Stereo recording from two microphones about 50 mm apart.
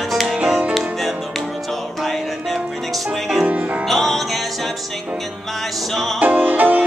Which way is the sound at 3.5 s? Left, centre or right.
Right.